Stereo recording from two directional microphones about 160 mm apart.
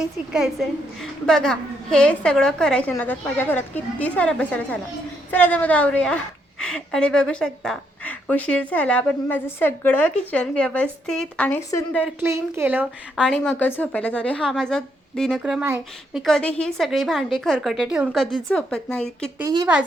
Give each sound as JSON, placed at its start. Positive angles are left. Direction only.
{"t": 0.0, "sound": "a woman's voice", "side_deg": -5}
{"t": 12.2, "sound": "a woman's voice", "side_deg": -15}
{"t": 13.6, "sound": "a woman's voice", "side_deg": 10}
{"t": 19.4, "sound": "a woman's voice", "side_deg": -15}